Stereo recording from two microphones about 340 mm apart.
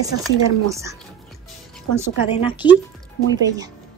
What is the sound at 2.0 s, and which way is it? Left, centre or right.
Speech, centre.